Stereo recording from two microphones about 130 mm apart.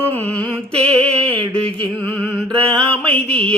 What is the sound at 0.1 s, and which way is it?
Mantra, 10° left (ahead or behind).